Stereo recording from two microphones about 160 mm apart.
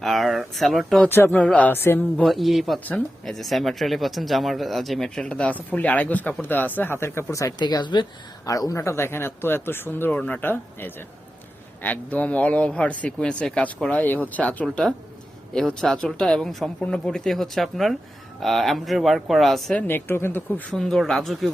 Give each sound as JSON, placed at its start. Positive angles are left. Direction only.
{"t": 0.0, "sound": "speech", "side_deg": 0}
{"t": 2.2, "sound": "speech", "side_deg": 0}
{"t": 19.9, "sound": "speech", "side_deg": 15}
{"t": 20.7, "sound": "speech", "side_deg": 0}